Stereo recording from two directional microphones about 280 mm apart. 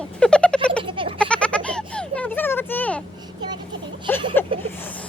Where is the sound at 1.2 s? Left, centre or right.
Centre.